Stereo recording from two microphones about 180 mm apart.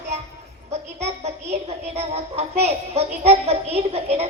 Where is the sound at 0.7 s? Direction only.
35° right (ahead or behind).